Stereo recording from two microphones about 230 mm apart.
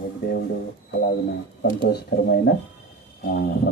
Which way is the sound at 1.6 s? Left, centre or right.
Left.